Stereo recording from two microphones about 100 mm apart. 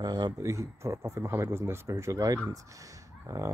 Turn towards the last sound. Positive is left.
turn(degrees=-30)  # may be behind; listen again after turning